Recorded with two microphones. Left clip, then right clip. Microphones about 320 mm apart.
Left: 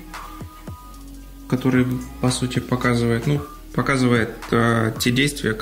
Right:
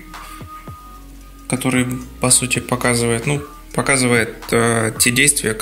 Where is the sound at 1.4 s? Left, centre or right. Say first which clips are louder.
Right 1 dB; centre.